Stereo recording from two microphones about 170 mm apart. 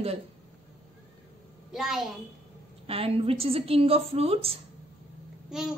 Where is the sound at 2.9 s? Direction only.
35° right (ahead or behind).